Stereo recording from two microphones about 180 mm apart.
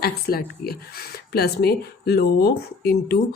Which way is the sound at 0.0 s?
60° left (ahead or behind).